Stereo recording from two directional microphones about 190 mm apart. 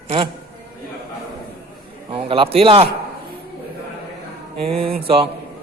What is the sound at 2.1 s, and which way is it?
Speech, 25° right (ahead or behind).